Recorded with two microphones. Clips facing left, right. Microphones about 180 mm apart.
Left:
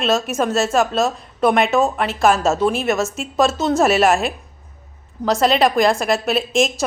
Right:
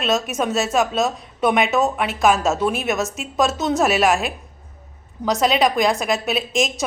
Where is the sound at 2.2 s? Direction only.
Centre (ahead or behind).